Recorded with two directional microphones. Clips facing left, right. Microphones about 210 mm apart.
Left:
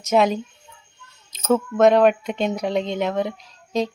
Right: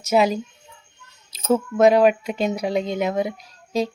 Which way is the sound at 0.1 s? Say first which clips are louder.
Even; 5° right (ahead or behind).